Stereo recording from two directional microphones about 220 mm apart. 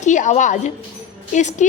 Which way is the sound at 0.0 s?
35° left (ahead or behind).